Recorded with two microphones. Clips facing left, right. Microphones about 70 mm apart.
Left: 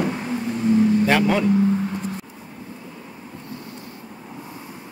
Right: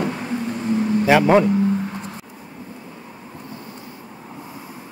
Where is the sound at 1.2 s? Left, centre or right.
Right.